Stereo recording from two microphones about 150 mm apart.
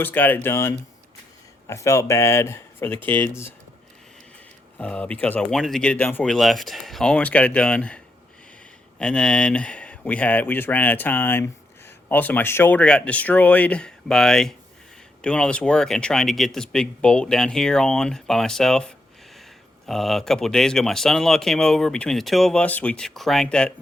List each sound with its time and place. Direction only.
0.0 s speech: 10° left (ahead or behind)
4.8 s speech: 10° left (ahead or behind)